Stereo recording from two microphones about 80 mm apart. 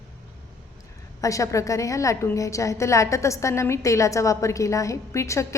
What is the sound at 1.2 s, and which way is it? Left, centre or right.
A woman's voice, left.